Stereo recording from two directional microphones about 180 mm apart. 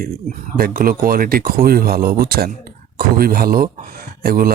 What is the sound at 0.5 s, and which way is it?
Speech, 55° right (ahead or behind).